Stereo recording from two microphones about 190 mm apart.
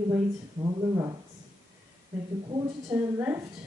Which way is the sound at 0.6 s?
20° right (ahead or behind).